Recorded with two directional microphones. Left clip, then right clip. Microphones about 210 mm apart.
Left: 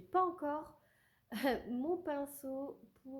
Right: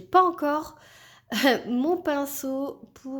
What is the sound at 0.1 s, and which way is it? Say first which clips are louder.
A woman's voice: right 14 dB; 25° right (ahead or behind).